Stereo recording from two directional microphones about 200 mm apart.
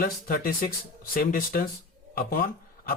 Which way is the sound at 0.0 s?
45° left (ahead or behind).